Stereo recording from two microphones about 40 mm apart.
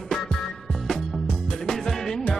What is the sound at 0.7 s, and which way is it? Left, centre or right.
Music, centre.